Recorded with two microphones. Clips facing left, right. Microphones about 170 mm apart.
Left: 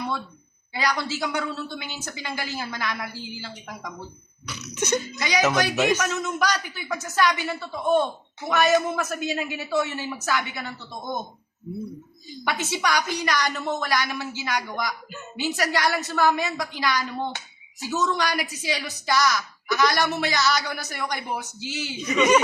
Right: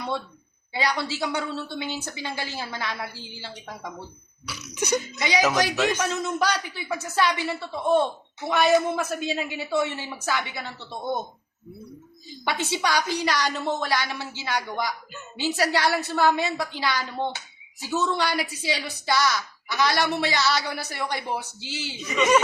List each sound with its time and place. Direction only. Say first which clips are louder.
0.7 s speech: even; 25° right (ahead or behind)
4.4 s cough: left 1 dB; 10° right (ahead or behind)
6.0 s speech: even; 30° right (ahead or behind)
12.5 s speech: even; 30° right (ahead or behind)